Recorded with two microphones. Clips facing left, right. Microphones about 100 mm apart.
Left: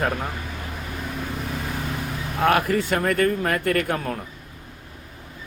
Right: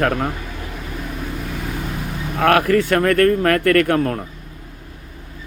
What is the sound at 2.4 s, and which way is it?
Speech, 60° right (ahead or behind).